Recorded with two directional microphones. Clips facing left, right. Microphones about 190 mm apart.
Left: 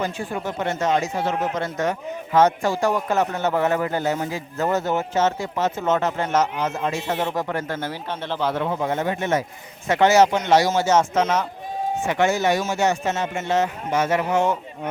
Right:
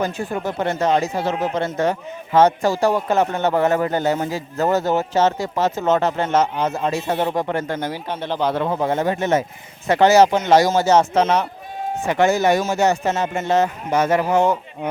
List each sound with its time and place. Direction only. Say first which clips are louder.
0.0 s speech: right 3 dB; 40° right (ahead or behind); by 8.5 s 15° right (ahead or behind)
8.5 s speech: right 3 dB; 35° right (ahead or behind)